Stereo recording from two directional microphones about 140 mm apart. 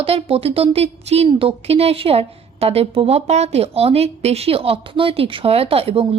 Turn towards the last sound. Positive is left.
turn(degrees=-40)  # may be behind; listen again after turning